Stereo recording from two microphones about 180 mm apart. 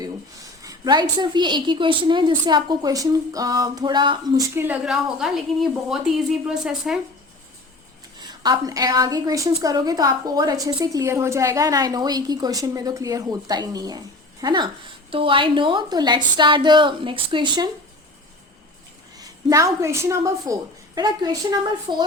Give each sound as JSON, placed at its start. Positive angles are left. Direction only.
{"t": 0.6, "sound": "a woman's voice", "side_deg": -20}
{"t": 8.3, "sound": "a woman's voice", "side_deg": -20}
{"t": 19.1, "sound": "a woman's voice", "side_deg": -20}